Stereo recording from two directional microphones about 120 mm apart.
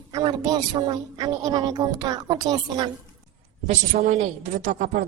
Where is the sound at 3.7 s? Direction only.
80° right.